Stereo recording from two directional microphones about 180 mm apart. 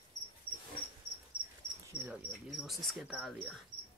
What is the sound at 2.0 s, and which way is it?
Cricket, 10° right (ahead or behind).